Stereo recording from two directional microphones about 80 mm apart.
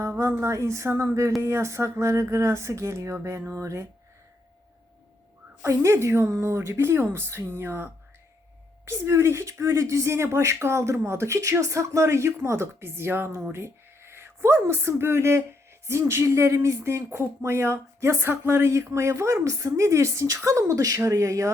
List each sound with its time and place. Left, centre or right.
0.1 s speech: right
5.6 s speech: right